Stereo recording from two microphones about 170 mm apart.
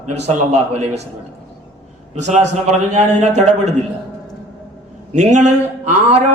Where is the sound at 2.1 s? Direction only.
40° right (ahead or behind).